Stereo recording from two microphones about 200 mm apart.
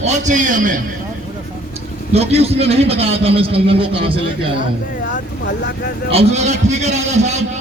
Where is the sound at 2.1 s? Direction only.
30° right (ahead or behind).